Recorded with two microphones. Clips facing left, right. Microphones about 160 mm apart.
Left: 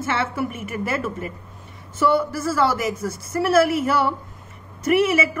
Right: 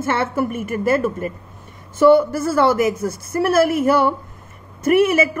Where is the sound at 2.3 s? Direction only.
55° right (ahead or behind).